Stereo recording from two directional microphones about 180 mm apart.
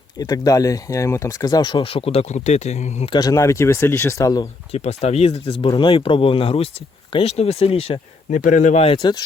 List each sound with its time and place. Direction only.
0.2 s speech: 20° left (ahead or behind); by 3.1 s 40° left (ahead or behind)
3.1 s speech: 20° left (ahead or behind)
4.7 s speech: 35° left (ahead or behind)
8.3 s speech: 45° left (ahead or behind); by 9.2 s 25° left (ahead or behind)